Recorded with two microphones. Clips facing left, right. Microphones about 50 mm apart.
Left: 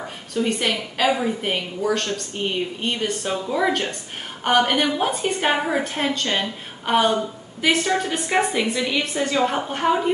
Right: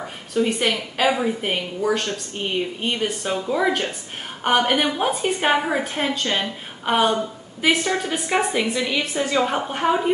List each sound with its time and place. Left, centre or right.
0.3 s a woman's voice: centre